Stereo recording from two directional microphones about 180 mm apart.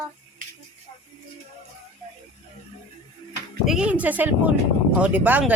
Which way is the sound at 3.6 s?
5° right (ahead or behind).